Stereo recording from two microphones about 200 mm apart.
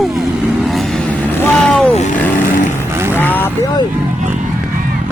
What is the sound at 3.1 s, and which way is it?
Vehicle, 10° left (ahead or behind).